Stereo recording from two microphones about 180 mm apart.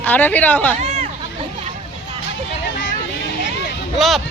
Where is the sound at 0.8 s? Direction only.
35° right (ahead or behind).